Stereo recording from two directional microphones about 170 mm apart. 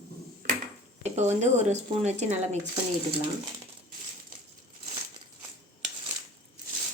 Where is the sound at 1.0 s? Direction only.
40° right (ahead or behind).